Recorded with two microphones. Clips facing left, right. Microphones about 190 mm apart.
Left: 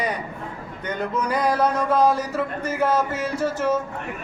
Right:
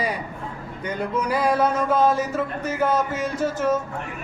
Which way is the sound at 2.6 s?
30° left (ahead or behind).